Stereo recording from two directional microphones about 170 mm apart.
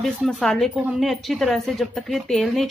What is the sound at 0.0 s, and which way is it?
Speech, centre (ahead or behind).